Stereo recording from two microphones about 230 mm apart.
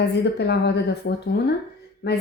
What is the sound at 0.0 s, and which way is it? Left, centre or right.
A woman's voice, left.